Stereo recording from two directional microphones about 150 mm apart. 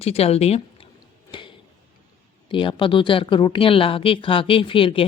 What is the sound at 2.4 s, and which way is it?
A woman's voice, 35° left (ahead or behind).